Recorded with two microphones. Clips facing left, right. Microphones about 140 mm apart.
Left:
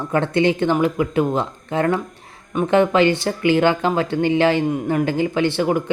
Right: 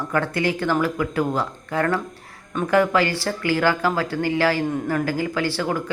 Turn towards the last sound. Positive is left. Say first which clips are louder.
# left 5 dB
turn(degrees=20)  # may be behind; listen again after turning